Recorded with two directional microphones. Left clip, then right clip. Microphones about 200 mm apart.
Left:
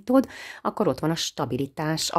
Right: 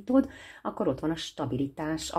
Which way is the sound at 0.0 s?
45° left (ahead or behind).